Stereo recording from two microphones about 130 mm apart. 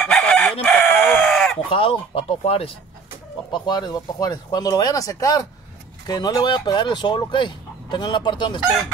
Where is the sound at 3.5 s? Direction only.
35° left (ahead or behind).